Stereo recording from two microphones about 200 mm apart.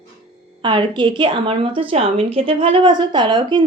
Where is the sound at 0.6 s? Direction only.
25° right (ahead or behind).